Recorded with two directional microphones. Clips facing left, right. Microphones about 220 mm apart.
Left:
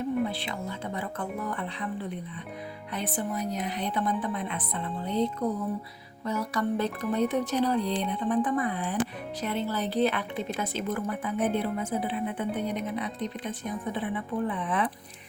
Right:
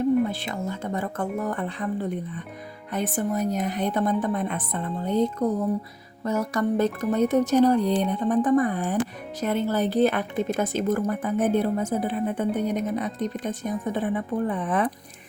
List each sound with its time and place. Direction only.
0.3 s a woman's voice: 45° right (ahead or behind)